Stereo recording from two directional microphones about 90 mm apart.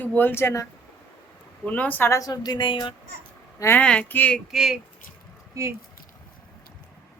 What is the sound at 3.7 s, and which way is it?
Speech, 15° left (ahead or behind).